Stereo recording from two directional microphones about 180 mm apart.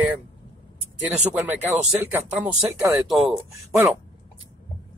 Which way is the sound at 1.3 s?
10° right (ahead or behind).